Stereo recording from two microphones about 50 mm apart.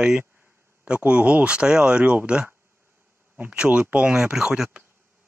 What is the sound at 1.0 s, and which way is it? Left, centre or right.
Speech, right.